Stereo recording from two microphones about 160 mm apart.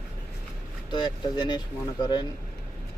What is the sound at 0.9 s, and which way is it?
Speech, 25° left (ahead or behind).